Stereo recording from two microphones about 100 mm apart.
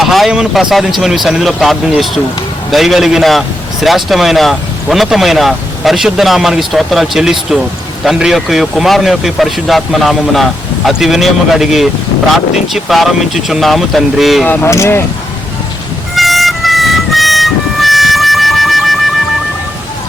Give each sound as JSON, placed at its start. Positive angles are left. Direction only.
{"t": 0.0, "sound": "a man's voice", "side_deg": 0}
{"t": 14.4, "sound": "speech", "side_deg": 20}
{"t": 16.1, "sound": "vehicle", "side_deg": 0}